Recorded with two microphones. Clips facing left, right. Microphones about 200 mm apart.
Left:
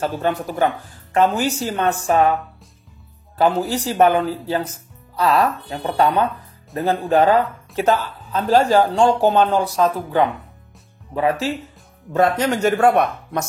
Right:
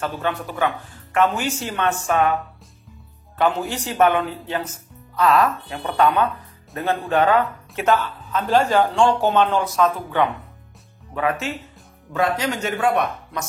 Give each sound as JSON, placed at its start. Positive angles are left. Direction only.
{"t": 0.0, "sound": "speech", "side_deg": 40}
{"t": 3.3, "sound": "a man's voice", "side_deg": 35}
{"t": 12.1, "sound": "speech", "side_deg": 50}